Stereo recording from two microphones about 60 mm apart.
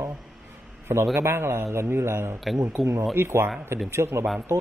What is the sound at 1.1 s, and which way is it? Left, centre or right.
A man's voice, right.